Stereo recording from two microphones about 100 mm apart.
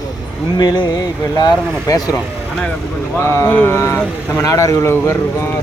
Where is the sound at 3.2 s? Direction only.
25° left (ahead or behind).